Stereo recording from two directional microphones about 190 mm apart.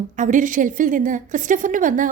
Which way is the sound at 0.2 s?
45° right (ahead or behind).